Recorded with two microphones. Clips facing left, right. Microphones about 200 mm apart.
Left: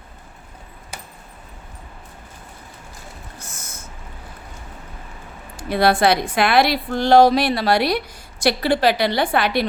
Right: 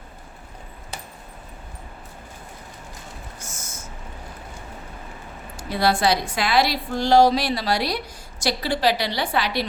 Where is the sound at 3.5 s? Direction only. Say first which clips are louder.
Even; 60° left (ahead or behind).